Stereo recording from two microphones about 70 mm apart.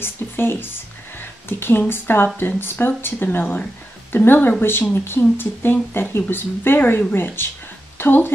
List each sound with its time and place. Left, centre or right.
0.0 s speech: left